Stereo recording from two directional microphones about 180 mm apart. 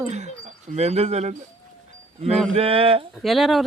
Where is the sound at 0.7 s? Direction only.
35° right (ahead or behind).